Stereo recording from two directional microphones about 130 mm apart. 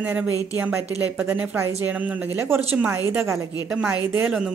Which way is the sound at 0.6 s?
15° right (ahead or behind).